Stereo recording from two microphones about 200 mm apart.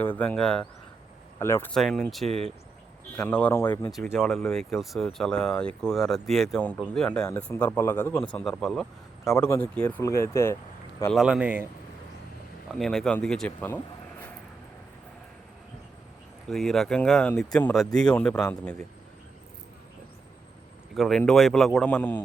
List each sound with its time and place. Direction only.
0.0 s speech: 10° left (ahead or behind)
2.2 s speech: 30° right (ahead or behind)
3.2 s speech: 5° left (ahead or behind)
9.2 s speech: 15° left (ahead or behind)
11.0 s speech: centre (ahead or behind)
12.8 s speech: centre (ahead or behind)
16.5 s speech: centre (ahead or behind)
20.9 s speech: centre (ahead or behind)